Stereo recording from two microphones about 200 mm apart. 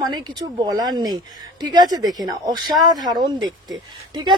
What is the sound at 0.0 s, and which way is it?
A woman's voice, 20° right (ahead or behind).